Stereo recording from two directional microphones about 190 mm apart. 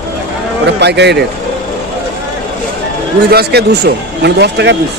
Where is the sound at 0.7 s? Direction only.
65° right (ahead or behind).